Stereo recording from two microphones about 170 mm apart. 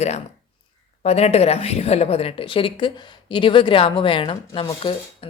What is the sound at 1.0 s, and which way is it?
A woman's voice, 40° left (ahead or behind).